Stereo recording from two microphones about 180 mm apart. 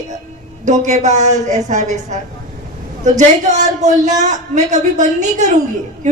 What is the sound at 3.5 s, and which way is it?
A woman's voice, 40° right (ahead or behind).